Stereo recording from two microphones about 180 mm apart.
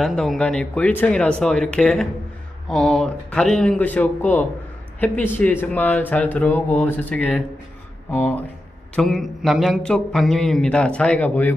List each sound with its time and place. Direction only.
0.0 s speech: centre (ahead or behind)